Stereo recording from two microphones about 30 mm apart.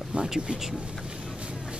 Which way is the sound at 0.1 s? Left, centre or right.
Right.